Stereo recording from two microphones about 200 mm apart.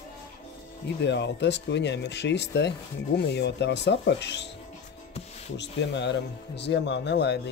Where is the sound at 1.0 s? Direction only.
60° left (ahead or behind).